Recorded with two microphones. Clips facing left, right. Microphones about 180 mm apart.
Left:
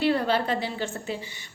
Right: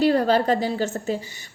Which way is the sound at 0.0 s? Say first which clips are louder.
Right 5 dB; 40° right (ahead or behind).